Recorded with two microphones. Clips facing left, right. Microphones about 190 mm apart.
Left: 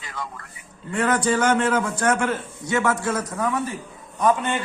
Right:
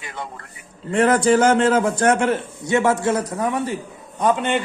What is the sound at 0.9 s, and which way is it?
A man's voice, 30° right (ahead or behind).